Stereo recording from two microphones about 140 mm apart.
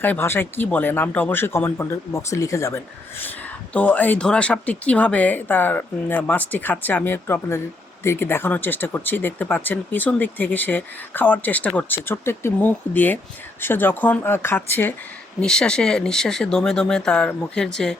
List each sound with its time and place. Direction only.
0.0 s speech: 15° left (ahead or behind)